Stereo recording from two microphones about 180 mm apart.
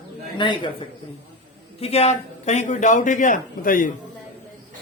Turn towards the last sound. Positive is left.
turn(degrees=50)  # may be behind; listen again after turning